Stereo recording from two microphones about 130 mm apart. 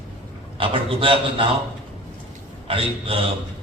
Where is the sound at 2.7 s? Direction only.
45° right (ahead or behind).